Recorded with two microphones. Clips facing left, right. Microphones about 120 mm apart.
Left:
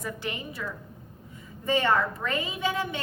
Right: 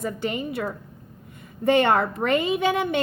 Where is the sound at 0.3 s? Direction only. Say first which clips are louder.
Right 8 dB; 65° right (ahead or behind).